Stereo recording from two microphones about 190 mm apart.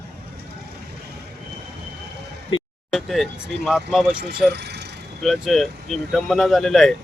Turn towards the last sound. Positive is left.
turn(degrees=0)  # may be behind; listen again after turning